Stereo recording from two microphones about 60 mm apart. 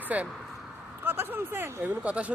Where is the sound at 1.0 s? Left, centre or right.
Right.